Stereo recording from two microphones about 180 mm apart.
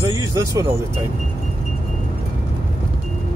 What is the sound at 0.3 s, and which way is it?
Speech, 20° right (ahead or behind).